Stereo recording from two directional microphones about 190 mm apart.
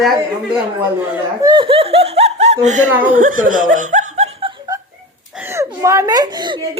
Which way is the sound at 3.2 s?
45° right (ahead or behind).